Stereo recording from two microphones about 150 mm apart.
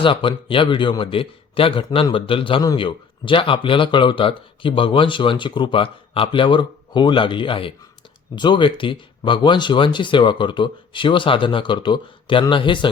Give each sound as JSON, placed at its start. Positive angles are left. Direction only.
{"t": 0.0, "sound": "a man's voice", "side_deg": 35}